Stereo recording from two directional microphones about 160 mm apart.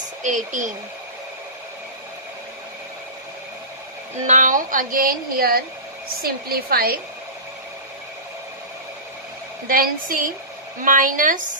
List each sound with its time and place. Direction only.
0.2 s speech: 50° right (ahead or behind)
4.3 s a woman's voice: 55° right (ahead or behind); by 7.0 s 70° right (ahead or behind)
9.7 s speech: 60° right (ahead or behind)